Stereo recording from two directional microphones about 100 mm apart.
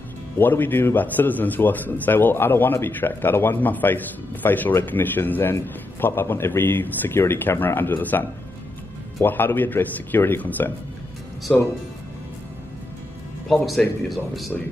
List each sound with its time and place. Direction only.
0.4 s a man's voice: 20° left (ahead or behind)
11.5 s speech: 5° left (ahead or behind)
13.5 s speech: centre (ahead or behind)